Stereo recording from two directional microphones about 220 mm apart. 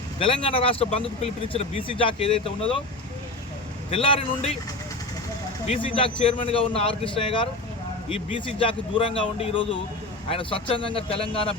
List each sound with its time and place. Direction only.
0.2 s speech: 25° left (ahead or behind)
3.9 s speech: 25° left (ahead or behind)
5.6 s speech: 25° left (ahead or behind)